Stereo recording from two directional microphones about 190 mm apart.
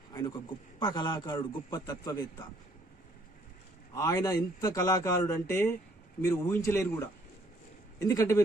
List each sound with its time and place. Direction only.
0.1 s a man's voice: 20° left (ahead or behind)
3.9 s a man's voice: 20° left (ahead or behind)